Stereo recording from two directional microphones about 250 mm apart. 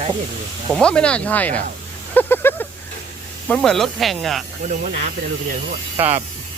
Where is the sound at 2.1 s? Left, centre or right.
Centre.